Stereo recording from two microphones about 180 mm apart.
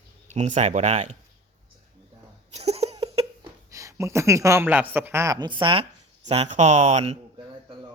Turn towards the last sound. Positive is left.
turn(degrees=-35)  # may be behind; listen again after turning